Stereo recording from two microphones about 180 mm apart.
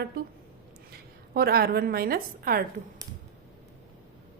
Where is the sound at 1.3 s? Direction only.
55° right (ahead or behind).